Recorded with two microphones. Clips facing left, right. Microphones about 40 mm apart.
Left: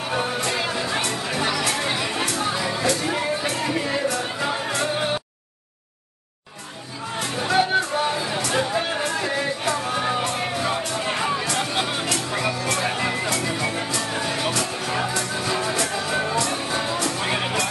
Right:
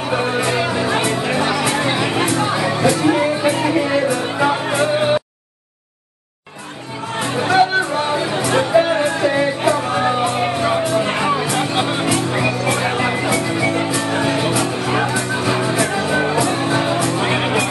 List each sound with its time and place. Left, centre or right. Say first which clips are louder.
0.1 s music: right 6 dB; right
7.2 s music: right 6 dB; right